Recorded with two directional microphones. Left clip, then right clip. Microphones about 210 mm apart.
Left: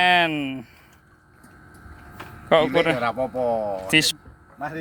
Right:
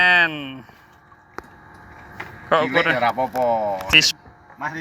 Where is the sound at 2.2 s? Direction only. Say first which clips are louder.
Left 1 dB; 35° left (ahead or behind).